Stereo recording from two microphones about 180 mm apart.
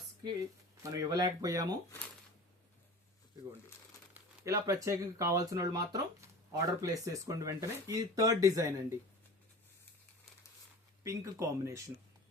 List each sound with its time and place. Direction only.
0.8 s speech: 20° right (ahead or behind)
4.1 s speech: 15° right (ahead or behind)
11.0 s speech: 15° right (ahead or behind)